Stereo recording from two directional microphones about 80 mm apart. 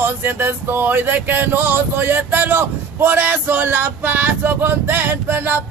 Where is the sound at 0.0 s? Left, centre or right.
Right.